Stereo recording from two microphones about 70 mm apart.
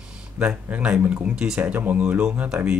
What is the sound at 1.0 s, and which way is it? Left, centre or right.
Speech, centre.